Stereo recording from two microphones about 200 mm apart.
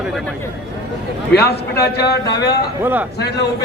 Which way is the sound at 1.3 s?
55° left (ahead or behind).